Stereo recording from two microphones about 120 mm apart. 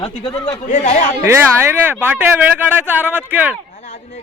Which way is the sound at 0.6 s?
80° left.